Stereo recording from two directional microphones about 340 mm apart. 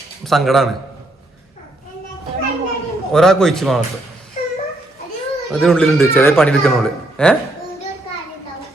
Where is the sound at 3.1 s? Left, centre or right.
Centre.